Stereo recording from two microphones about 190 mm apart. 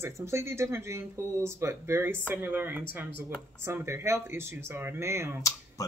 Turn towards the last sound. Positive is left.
turn(degrees=-15)  # may be behind; listen again after turning